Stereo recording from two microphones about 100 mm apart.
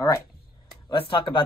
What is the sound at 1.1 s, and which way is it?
Speech, 60° left (ahead or behind).